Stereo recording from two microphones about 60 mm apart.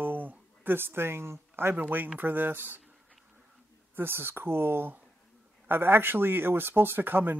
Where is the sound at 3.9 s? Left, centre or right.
Right.